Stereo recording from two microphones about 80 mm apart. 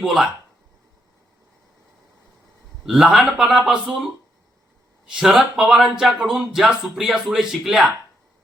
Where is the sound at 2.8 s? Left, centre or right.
Centre.